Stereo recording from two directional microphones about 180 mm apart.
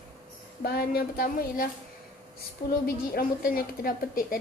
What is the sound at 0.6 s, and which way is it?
A woman's voice, 55° left (ahead or behind).